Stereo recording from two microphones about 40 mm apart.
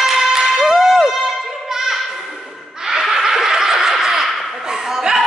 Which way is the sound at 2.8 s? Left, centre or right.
Centre.